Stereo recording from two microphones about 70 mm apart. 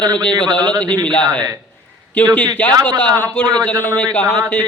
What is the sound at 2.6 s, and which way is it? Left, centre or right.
A man's voice, centre.